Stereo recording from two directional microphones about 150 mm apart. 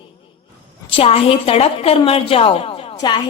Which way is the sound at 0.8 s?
40° left (ahead or behind).